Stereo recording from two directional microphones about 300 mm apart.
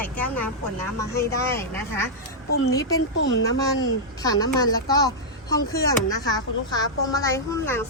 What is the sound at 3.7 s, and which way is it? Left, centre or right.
A woman's voice, centre.